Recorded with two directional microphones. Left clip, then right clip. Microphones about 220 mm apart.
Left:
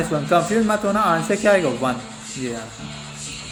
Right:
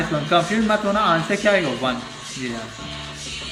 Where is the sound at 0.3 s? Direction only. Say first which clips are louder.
Even; 50° left (ahead or behind).